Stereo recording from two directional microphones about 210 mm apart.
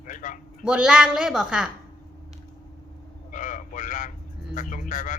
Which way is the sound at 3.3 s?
40° left (ahead or behind).